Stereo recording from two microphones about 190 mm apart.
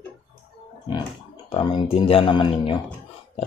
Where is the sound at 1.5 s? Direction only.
30° left (ahead or behind).